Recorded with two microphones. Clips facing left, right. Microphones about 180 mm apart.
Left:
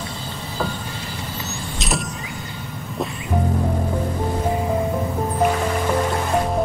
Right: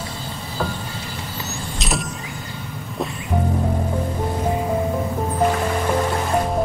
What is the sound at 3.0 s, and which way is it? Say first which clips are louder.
Music: even; centre (ahead or behind).